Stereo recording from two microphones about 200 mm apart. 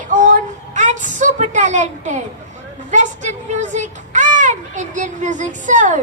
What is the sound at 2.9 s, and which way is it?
A child's voice, 35° right (ahead or behind).